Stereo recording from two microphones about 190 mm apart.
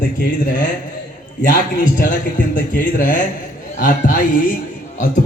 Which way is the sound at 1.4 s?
45° left (ahead or behind).